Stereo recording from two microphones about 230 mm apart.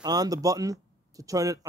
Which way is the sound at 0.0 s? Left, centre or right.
Centre.